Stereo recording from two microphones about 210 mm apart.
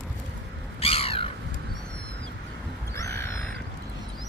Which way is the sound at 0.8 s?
25° left (ahead or behind).